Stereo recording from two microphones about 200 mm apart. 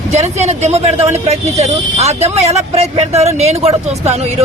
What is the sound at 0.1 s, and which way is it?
Speech, 35° right (ahead or behind).